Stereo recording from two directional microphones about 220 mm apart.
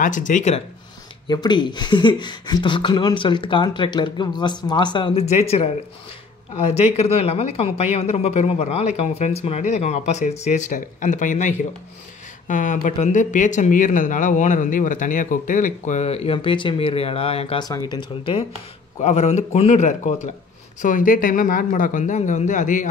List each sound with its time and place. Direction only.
0.0 s speech: 35° left (ahead or behind)
1.2 s speech: 20° left (ahead or behind); by 22.8 s 35° left (ahead or behind)